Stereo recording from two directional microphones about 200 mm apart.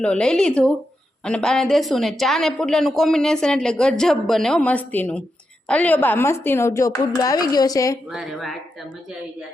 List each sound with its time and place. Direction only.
0.0 s a woman's voice: 5° left (ahead or behind)
8.1 s a woman's voice: centre (ahead or behind)